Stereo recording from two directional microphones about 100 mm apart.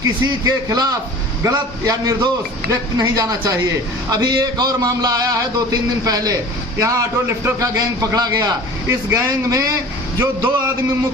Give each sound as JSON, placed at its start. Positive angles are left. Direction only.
{"t": 0.0, "sound": "a man's voice", "side_deg": -35}
{"t": 9.0, "sound": "a man's voice", "side_deg": -25}
{"t": 9.5, "sound": "a man's voice", "side_deg": -35}